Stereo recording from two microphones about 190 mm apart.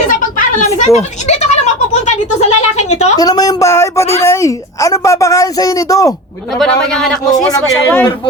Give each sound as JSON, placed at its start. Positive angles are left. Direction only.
{"t": 0.1, "sound": "a sound", "side_deg": 45}
{"t": 3.2, "sound": "a woman's voice", "side_deg": 20}
{"t": 6.6, "sound": "a woman's voice", "side_deg": 0}